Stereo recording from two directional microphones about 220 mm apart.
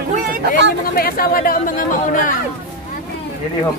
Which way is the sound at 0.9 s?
45° left (ahead or behind).